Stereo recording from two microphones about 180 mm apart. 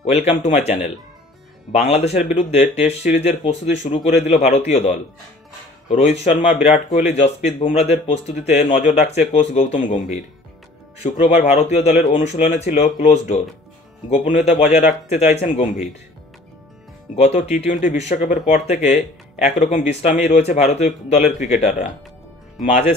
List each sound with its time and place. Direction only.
0.0 s speech: 40° left (ahead or behind)
17.1 s speech: 40° left (ahead or behind)